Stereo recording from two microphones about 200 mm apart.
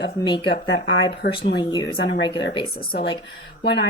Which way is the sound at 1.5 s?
20° left (ahead or behind).